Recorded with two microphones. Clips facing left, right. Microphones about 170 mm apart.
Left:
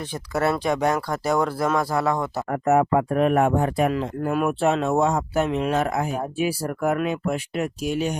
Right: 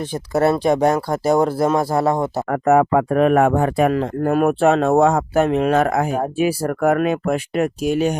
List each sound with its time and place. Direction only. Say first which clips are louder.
0.3 s speech: right 6 dB; 30° right (ahead or behind)
2.5 s speech: right 4 dB; 90° right
3.9 s speech: right 6 dB; 50° right (ahead or behind)